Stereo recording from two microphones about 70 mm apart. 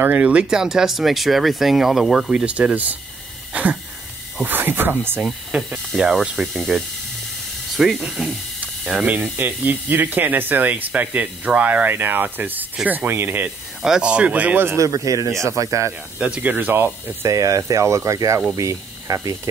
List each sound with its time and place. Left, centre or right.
0.0 s speech: right
2.4 s speech: centre
4.5 s speech: right
5.5 s speech: centre
9.0 s speech: right
13.8 s speech: centre; by 14.8 s right
14.8 s speech: right
16.2 s speech: right
17.4 s speech: right